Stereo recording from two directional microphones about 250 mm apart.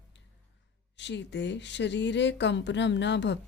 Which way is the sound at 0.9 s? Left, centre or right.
Left.